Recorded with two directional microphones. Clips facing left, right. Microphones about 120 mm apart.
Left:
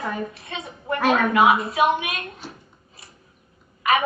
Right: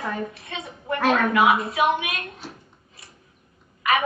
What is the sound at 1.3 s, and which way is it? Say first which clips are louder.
A woman's voice: left 2 dB; 30° left (ahead or behind).